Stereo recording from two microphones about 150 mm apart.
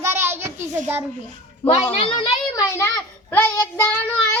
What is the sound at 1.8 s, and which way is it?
Speech, 35° left (ahead or behind).